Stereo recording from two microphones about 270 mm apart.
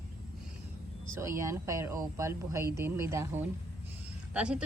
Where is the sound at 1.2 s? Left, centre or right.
Centre.